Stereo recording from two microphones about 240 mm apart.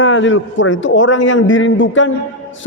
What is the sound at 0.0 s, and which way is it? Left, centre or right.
A man's voice, left.